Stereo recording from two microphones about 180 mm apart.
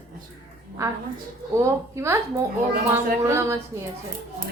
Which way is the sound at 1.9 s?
15° right (ahead or behind).